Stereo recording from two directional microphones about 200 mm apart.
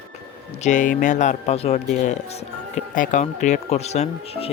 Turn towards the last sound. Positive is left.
turn(degrees=30)  # may be behind; listen again after turning